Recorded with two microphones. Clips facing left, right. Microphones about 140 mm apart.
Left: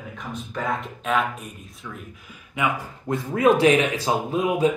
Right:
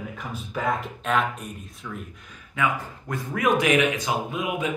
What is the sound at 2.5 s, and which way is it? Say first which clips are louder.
Speech: left 1 dB; 20° left (ahead or behind).